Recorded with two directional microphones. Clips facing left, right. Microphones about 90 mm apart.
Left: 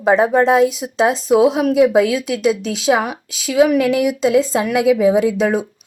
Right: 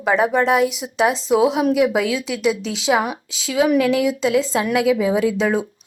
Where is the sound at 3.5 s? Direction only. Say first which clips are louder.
Left 3 dB; 25° left (ahead or behind).